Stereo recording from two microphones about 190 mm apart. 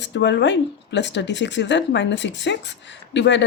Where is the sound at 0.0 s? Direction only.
65° left (ahead or behind).